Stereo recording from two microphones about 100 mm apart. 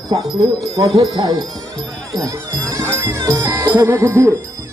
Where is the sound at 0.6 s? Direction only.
40° right (ahead or behind).